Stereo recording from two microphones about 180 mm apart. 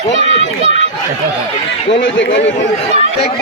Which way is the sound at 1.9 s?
90° left.